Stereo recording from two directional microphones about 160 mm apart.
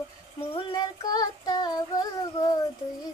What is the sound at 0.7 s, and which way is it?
Child singing, 25° left (ahead or behind).